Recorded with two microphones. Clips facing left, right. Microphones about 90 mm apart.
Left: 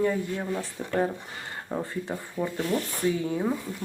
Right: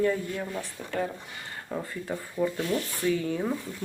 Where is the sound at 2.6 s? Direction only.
30° left (ahead or behind).